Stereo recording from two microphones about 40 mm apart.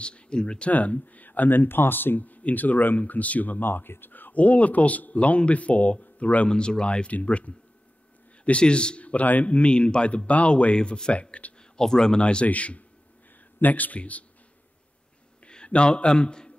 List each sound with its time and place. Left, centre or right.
0.0 s speech: left
0.7 s speech: left
3.0 s speech: left
4.3 s speech: left
6.5 s speech: left
9.7 s speech: left
11.7 s speech: centre
12.2 s speech: left
12.4 s speech: left
15.4 s a man's voice: left